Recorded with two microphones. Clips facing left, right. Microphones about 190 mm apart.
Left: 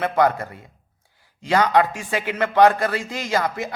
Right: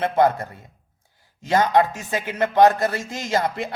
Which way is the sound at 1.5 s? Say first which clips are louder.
Even; 20° right (ahead or behind).